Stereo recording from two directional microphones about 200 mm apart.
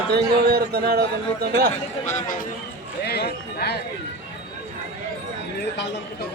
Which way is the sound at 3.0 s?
55° left (ahead or behind).